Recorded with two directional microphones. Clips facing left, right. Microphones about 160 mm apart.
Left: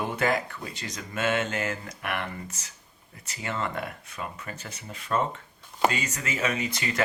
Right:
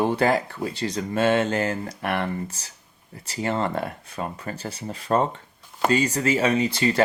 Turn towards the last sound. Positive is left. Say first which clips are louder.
# right 8 dB
turn(degrees=-30)  # may be behind; listen again after turning